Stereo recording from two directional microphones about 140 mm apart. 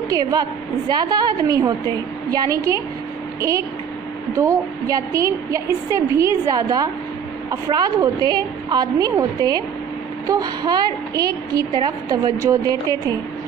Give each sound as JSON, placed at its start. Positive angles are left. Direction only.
{"t": 0.1, "sound": "a woman's voice", "side_deg": -25}
{"t": 10.2, "sound": "a woman's voice", "side_deg": -30}